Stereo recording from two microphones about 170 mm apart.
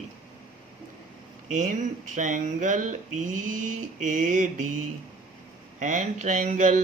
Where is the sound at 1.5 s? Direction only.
50° right (ahead or behind).